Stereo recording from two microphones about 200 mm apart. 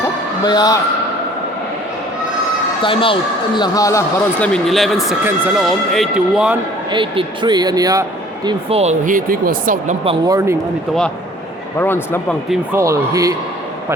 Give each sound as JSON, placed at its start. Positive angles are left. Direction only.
{"t": 0.4, "sound": "a man's voice", "side_deg": 20}
{"t": 2.8, "sound": "a man's voice", "side_deg": 25}
{"t": 6.9, "sound": "speech", "side_deg": -25}
{"t": 8.4, "sound": "speech", "side_deg": -30}
{"t": 10.0, "sound": "speech", "side_deg": -30}
{"t": 10.3, "sound": "speech", "side_deg": -15}
{"t": 11.8, "sound": "speech", "side_deg": 10}
{"t": 12.7, "sound": "speech", "side_deg": -15}